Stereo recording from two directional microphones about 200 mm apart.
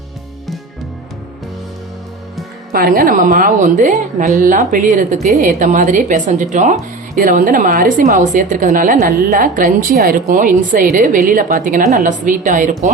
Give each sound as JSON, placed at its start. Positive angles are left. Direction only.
{"t": 2.7, "sound": "a woman's voice", "side_deg": -50}